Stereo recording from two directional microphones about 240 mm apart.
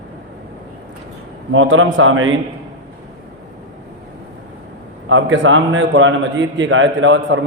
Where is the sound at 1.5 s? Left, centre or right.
Right.